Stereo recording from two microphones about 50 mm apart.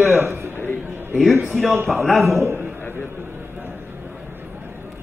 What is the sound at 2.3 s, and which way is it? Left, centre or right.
Speech, right.